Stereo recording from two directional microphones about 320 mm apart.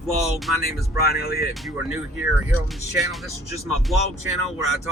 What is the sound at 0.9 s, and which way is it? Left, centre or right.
Speech, left.